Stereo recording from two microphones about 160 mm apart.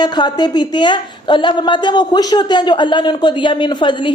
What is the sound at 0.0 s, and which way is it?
A woman's voice, 25° left (ahead or behind).